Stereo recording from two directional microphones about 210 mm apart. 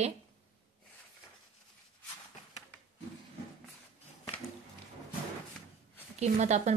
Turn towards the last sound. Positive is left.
turn(degrees=-35)  # may be behind; listen again after turning